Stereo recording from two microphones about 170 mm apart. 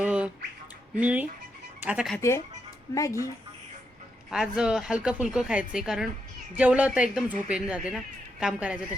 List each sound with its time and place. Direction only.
0.0 s squawk: 5° right (ahead or behind)
0.9 s a woman's voice: 10° right (ahead or behind)
2.1 s speech: 15° left (ahead or behind)
4.3 s a woman's voice: 5° right (ahead or behind)